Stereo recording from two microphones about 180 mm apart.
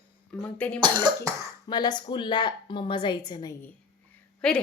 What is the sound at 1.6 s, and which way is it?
Speech, 25° left (ahead or behind).